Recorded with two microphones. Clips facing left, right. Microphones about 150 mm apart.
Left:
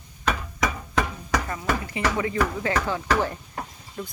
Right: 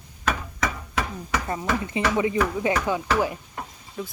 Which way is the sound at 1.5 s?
25° right (ahead or behind).